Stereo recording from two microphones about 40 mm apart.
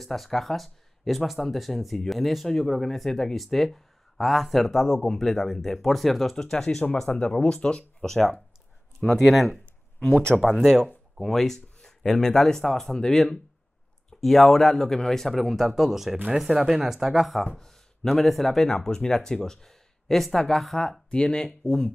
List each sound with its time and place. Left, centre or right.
0.0 s speech: centre
6.3 s speech: centre
7.1 s speech: left
8.0 s speech: centre
14.2 s speech: centre
17.6 s speech: centre
18.7 s speech: centre
21.1 s speech: left